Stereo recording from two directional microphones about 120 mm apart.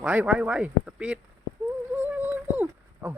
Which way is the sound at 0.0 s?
10° right (ahead or behind).